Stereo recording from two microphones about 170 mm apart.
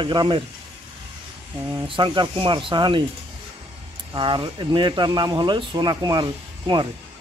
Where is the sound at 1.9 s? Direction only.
30° right (ahead or behind).